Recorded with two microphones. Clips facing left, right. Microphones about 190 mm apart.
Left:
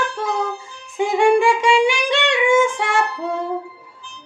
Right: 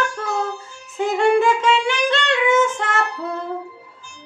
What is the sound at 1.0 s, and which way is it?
Music, 10° left (ahead or behind).